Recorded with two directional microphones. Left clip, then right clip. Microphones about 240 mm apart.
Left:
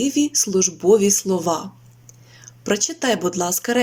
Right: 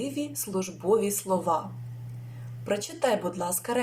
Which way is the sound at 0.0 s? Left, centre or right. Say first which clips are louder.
Left 13 dB; left.